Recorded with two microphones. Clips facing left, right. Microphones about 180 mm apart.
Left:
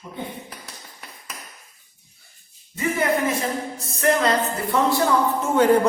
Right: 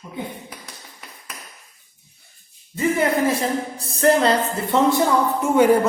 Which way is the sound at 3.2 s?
35° right (ahead or behind).